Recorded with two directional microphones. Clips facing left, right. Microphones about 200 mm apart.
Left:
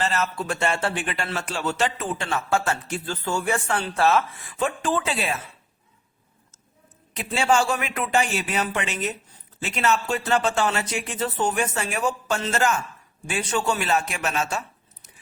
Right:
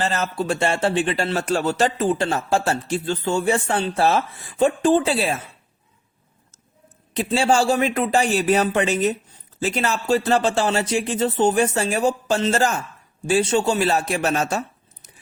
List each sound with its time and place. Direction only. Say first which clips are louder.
0.0 s a man's voice: right 2 dB; 35° right (ahead or behind)
7.2 s a man's voice: right 3 dB; 30° right (ahead or behind)